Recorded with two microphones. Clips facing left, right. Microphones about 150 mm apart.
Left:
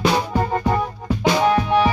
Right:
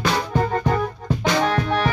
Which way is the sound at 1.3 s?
10° left (ahead or behind).